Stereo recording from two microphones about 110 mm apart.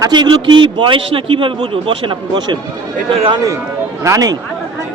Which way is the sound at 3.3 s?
30° right (ahead or behind).